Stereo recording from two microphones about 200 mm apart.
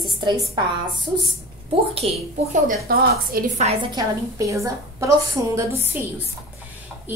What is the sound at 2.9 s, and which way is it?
Speech, 45° right (ahead or behind).